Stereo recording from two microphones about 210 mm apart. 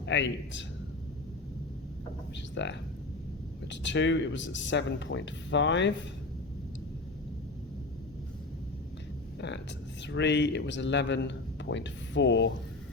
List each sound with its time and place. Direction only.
0.0 s a man's voice: 60° left (ahead or behind)
2.6 s a man's voice: 60° left (ahead or behind)
10.1 s a man's voice: 55° left (ahead or behind)